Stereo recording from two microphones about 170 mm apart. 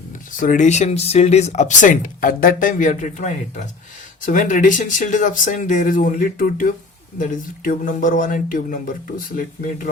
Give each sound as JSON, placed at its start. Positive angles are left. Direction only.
{"t": 0.3, "sound": "speech", "side_deg": 50}